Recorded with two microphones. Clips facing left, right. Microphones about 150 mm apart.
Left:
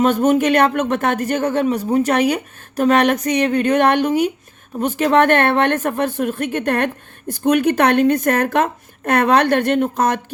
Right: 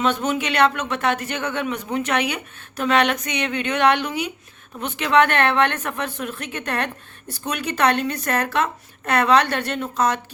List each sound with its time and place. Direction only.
0.0 s speech: 45° left (ahead or behind)